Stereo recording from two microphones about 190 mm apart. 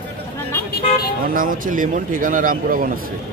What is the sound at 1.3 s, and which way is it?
Speech, 45° right (ahead or behind).